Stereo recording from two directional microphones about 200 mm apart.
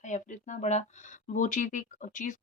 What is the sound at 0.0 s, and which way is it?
Speech, 40° left (ahead or behind).